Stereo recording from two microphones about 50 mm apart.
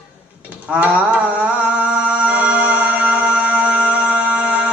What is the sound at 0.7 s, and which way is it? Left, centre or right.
Music, right.